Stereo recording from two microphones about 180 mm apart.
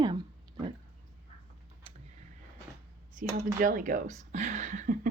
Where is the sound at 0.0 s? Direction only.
25° right (ahead or behind).